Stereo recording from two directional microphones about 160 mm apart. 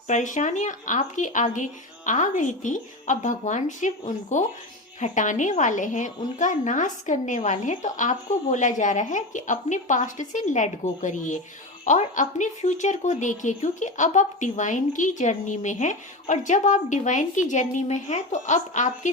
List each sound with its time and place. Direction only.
0.1 s speech: 50° left (ahead or behind)